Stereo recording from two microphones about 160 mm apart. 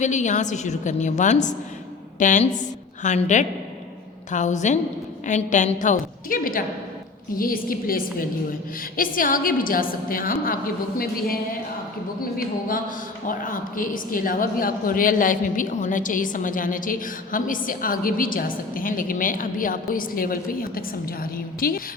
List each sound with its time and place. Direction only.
0.0 s a woman's voice: 50° left (ahead or behind); by 11.3 s 65° left (ahead or behind)
12.4 s a woman's voice: 60° left (ahead or behind)